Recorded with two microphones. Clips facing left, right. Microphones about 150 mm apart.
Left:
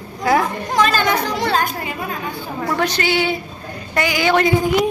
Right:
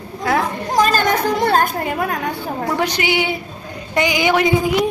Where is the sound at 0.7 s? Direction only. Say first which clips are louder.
Right 2 dB; 40° right (ahead or behind); by 2.3 s 65° right (ahead or behind).